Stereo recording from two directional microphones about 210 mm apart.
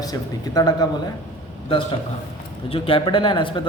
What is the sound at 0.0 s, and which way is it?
Speech, 15° left (ahead or behind).